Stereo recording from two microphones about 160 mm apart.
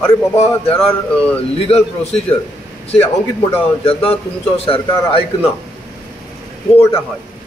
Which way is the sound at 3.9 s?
40° left (ahead or behind).